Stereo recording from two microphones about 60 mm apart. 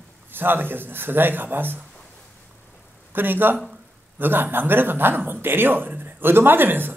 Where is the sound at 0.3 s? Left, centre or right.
Right.